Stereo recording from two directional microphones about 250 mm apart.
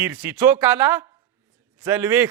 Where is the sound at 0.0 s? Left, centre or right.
Centre.